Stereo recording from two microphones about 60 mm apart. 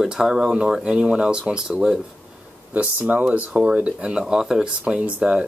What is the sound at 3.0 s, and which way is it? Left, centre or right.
Speech, right.